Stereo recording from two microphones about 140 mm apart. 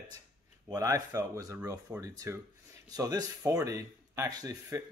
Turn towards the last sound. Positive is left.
turn(degrees=-25)  # may be behind; listen again after turning